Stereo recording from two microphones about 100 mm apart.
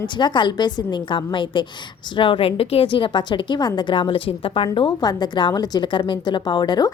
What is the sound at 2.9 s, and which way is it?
A woman's voice, 55° left (ahead or behind).